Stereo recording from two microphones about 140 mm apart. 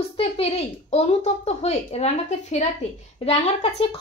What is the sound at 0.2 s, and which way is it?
A woman's voice, 45° left (ahead or behind).